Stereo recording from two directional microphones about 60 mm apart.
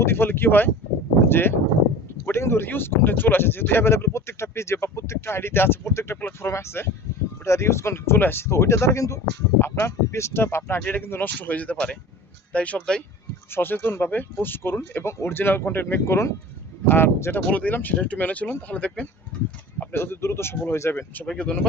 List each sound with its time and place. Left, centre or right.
0.0 s speech: left
9.6 s speech: left
10.8 s speech: left; by 13.0 s centre
13.5 s speech: left
16.0 s speech: left
17.5 s speech: left
19.9 s speech: left
21.2 s speech: centre